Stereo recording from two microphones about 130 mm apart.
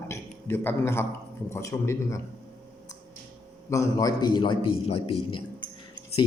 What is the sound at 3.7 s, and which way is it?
A man's voice, 25° left (ahead or behind).